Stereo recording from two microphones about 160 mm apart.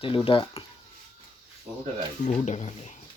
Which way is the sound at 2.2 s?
45° left (ahead or behind).